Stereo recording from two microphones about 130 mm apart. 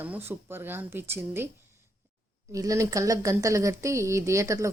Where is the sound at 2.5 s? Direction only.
25° right (ahead or behind).